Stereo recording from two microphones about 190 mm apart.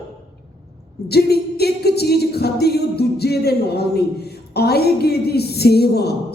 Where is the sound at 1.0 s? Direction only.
55° left (ahead or behind).